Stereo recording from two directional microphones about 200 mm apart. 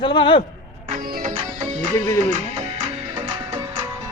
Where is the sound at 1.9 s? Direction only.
15° left (ahead or behind).